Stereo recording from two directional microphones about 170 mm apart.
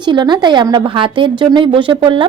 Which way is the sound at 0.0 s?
25° right (ahead or behind).